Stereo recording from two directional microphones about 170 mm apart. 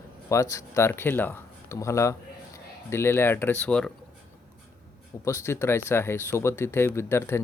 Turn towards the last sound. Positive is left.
turn(degrees=15)  # may be behind; listen again after turning